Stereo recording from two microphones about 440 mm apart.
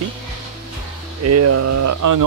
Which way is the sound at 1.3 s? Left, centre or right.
Right.